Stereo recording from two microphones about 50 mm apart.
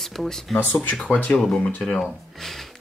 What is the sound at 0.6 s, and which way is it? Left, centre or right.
Speech, left.